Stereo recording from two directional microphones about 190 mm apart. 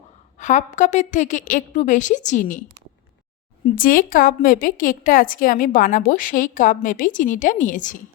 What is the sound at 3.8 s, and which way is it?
Speech, 45° left (ahead or behind).